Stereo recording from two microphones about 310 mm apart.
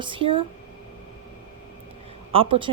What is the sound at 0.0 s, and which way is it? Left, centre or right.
Speech, centre.